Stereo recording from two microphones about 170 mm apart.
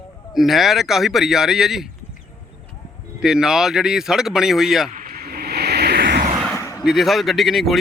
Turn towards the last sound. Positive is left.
turn(degrees=0)  # may be behind; listen again after turning